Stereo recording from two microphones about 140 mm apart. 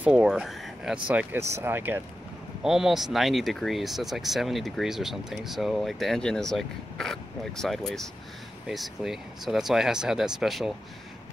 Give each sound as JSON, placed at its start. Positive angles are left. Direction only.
{"t": 0.0, "sound": "speech", "side_deg": -5}
{"t": 2.6, "sound": "speech", "side_deg": -5}